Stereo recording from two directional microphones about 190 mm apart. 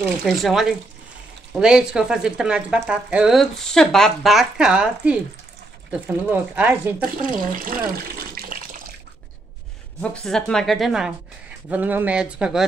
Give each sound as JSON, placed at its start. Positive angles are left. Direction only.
{"t": 0.0, "sound": "speech", "side_deg": 0}
{"t": 7.0, "sound": "speech", "side_deg": -45}
{"t": 10.1, "sound": "speech", "side_deg": 5}